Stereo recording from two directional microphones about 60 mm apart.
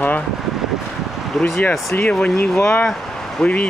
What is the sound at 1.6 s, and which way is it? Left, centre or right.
Speech, left.